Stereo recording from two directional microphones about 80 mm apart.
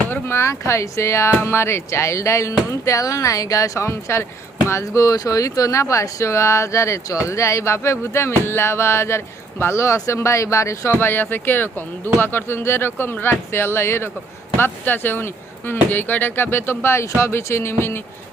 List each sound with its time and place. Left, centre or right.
0.1 s speech: left